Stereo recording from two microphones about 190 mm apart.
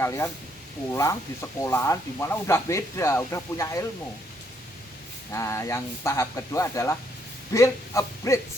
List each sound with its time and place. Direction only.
0.0 s speech: 15° left (ahead or behind)
5.3 s speech: 15° left (ahead or behind)